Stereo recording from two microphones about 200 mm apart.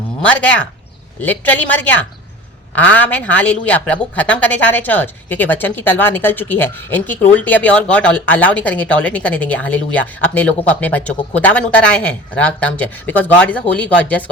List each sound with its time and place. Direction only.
0.2 s a woman's voice: 5° left (ahead or behind)